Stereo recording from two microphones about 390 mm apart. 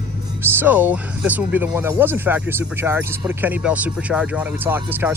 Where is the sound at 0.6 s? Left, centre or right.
Centre.